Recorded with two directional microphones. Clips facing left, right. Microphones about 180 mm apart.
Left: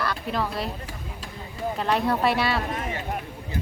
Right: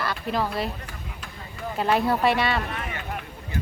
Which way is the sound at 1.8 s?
5° right (ahead or behind).